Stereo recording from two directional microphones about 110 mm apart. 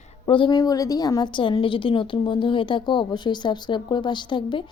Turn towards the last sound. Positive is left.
turn(degrees=45)  # may be behind; listen again after turning